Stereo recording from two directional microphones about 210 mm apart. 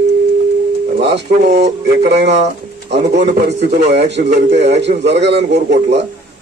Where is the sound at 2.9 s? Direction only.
55° right (ahead or behind).